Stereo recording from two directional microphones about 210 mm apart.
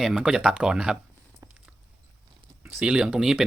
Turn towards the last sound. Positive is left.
turn(degrees=0)  # may be behind; listen again after turning